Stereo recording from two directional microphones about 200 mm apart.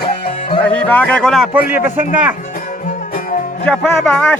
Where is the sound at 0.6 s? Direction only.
5° left (ahead or behind).